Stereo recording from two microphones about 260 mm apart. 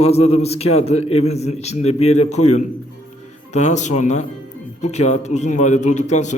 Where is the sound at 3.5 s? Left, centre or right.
Left.